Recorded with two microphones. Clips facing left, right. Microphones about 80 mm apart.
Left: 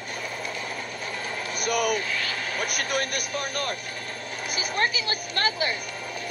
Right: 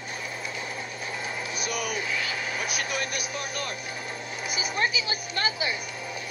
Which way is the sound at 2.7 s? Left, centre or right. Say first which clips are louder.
Left 3 dB; left.